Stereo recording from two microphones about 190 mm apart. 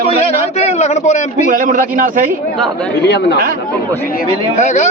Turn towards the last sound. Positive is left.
turn(degrees=40)  # may be behind; listen again after turning